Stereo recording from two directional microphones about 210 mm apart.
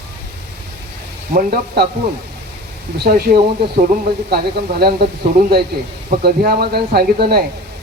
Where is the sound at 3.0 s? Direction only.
45° right (ahead or behind).